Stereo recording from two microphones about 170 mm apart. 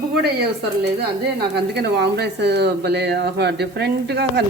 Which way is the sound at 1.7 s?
75° right (ahead or behind).